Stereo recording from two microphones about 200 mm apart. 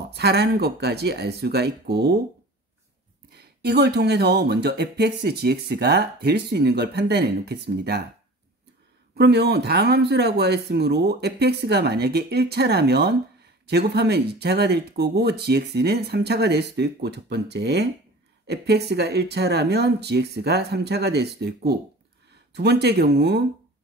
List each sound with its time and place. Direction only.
0.1 s speech: 55° right (ahead or behind)
3.3 s speech: 55° right (ahead or behind)
9.1 s speech: 55° right (ahead or behind)